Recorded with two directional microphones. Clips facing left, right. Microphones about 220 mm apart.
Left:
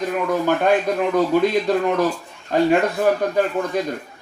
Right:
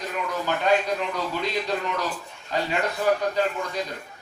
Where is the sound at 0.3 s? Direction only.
50° left (ahead or behind).